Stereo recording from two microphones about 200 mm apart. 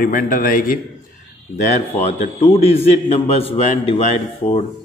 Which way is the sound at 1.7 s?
30° left (ahead or behind).